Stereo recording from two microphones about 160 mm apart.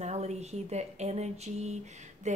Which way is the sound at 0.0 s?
45° right (ahead or behind).